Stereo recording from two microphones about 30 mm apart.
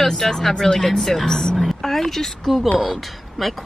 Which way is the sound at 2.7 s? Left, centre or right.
Centre.